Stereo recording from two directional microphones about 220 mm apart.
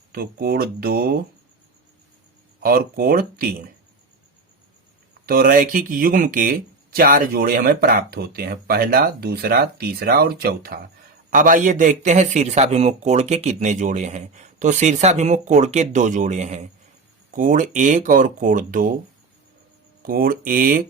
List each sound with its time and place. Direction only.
0.1 s speech: 45° right (ahead or behind)
2.6 s speech: 45° right (ahead or behind)
5.2 s speech: 40° right (ahead or behind)
20.0 s speech: 40° right (ahead or behind)